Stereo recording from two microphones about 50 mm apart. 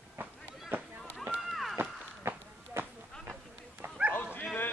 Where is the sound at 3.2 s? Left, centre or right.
Right.